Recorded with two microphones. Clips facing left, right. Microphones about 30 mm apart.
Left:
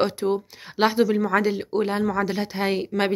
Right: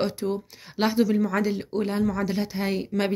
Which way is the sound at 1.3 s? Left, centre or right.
Left.